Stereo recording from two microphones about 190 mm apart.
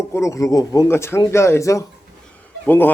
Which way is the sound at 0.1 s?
15° left (ahead or behind).